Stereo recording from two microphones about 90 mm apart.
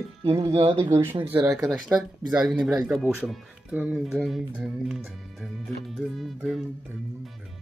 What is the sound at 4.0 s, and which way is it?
Speech, centre (ahead or behind).